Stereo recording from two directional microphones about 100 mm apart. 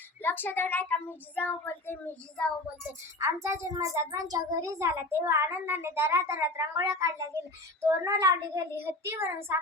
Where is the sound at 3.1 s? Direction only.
30° right (ahead or behind).